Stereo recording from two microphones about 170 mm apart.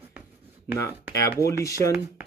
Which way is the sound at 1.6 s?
20° left (ahead or behind).